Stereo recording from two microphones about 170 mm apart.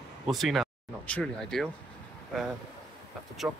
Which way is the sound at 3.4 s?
Centre (ahead or behind).